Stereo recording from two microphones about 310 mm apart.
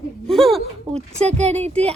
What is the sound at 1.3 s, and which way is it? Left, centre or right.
Speech, right.